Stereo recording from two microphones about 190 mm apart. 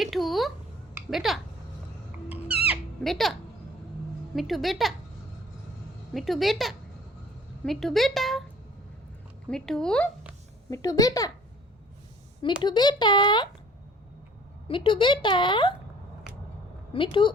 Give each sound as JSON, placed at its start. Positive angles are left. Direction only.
{"t": 0.0, "sound": "a sound", "side_deg": 0}
{"t": 1.1, "sound": "speech", "side_deg": 0}
{"t": 2.6, "sound": "music", "side_deg": 0}
{"t": 4.4, "sound": "speech", "side_deg": 0}
{"t": 6.1, "sound": "speech", "side_deg": 0}
{"t": 9.5, "sound": "speech", "side_deg": 5}
{"t": 10.7, "sound": "speech", "side_deg": 20}
{"t": 12.6, "sound": "speech", "side_deg": 20}
{"t": 14.7, "sound": "speech", "side_deg": 25}
{"t": 16.9, "sound": "speech", "side_deg": 25}